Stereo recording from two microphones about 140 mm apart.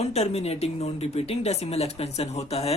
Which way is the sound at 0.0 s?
50° left (ahead or behind).